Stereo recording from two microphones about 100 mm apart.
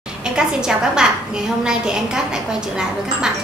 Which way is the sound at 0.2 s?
5° right (ahead or behind).